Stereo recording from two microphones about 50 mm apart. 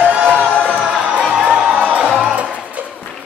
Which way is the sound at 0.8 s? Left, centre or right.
Centre.